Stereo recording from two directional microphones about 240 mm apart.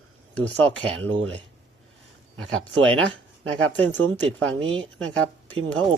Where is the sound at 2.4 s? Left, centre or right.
Centre.